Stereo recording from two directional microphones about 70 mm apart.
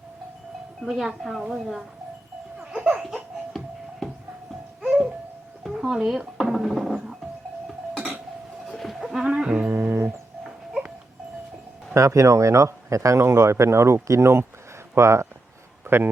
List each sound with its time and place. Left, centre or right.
0.8 s a woman's voice: centre
2.7 s laughter: right
5.6 s a sound: centre
6.1 s music: centre
8.6 s music: centre
9.6 s music: right
10.4 s music: centre
11.9 s speech: right